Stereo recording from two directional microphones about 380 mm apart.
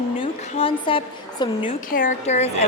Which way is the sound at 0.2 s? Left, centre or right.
Centre.